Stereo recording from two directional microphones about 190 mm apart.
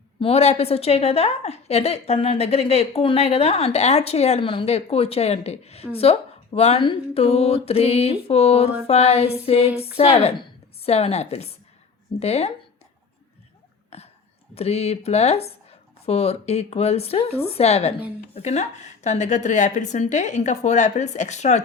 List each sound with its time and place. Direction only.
0.2 s a woman's voice: 35° left (ahead or behind)
13.9 s a sound: 35° left (ahead or behind)
14.5 s a woman's voice: 35° left (ahead or behind)